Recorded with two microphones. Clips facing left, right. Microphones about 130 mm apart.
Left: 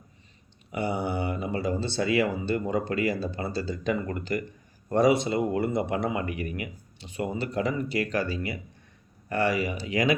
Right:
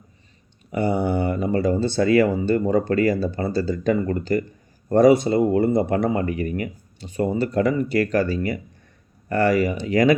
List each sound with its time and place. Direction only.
0.7 s speech: 45° right (ahead or behind)
5.4 s speech: 30° right (ahead or behind)